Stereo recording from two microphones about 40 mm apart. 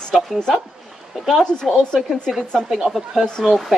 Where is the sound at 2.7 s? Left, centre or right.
Centre.